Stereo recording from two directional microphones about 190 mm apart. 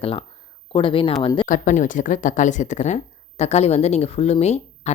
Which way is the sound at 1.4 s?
45° left (ahead or behind).